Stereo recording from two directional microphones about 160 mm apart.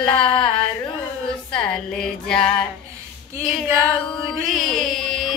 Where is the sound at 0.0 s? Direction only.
5° left (ahead or behind).